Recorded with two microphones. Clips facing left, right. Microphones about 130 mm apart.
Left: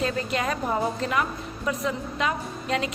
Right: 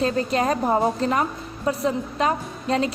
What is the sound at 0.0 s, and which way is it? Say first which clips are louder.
A woman's voice: right 5 dB; 35° right (ahead or behind).